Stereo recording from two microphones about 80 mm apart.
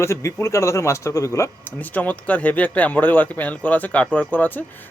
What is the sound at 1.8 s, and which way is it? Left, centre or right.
A man's voice, centre.